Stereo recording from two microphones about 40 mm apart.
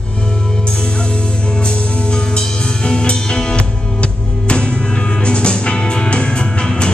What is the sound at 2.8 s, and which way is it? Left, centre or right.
Music, left.